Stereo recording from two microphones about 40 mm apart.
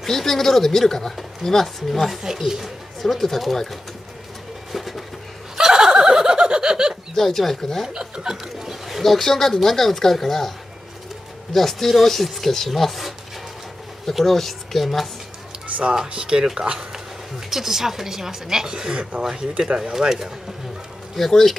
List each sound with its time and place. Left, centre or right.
0.0 s speech: centre
2.4 s speech: centre
3.0 s speech: centre
4.7 s a sound: centre
5.6 s a sound: centre
7.2 s speech: centre
7.9 s chuckle: centre
8.8 s speech: centre
11.5 s speech: centre
14.1 s speech: centre
15.8 s speech: centre
17.5 s speech: centre; by 19.2 s right
20.0 s speech: centre
21.2 s speech: centre